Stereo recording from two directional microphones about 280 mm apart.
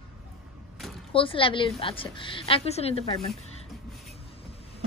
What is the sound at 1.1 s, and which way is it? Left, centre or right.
A woman's voice, centre.